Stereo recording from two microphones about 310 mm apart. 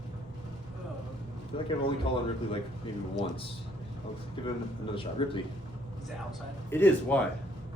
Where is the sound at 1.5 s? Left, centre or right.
Centre.